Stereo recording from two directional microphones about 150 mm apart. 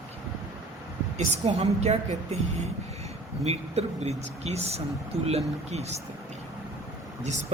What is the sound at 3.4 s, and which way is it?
A man's voice, 45° right (ahead or behind).